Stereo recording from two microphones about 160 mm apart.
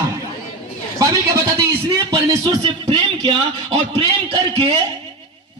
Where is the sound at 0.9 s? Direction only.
25° right (ahead or behind).